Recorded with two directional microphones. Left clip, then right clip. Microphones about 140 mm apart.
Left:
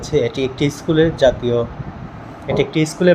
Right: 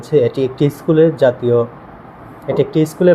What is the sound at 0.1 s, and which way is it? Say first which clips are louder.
Speech: right 4 dB; 30° right (ahead or behind).